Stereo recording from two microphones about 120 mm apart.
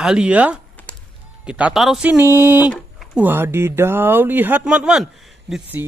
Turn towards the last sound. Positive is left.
turn(degrees=-15)  # may be behind; listen again after turning